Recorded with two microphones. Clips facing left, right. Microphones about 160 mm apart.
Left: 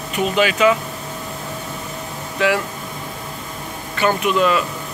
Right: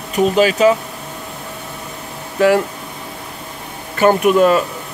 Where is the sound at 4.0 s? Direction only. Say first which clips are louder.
Right 6 dB; 45° right (ahead or behind).